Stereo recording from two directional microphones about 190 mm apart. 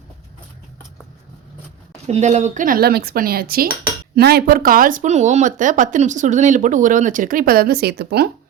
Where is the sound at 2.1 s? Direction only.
35° right (ahead or behind); by 8.3 s 60° right (ahead or behind).